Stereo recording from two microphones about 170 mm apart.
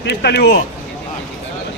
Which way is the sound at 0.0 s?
85° left.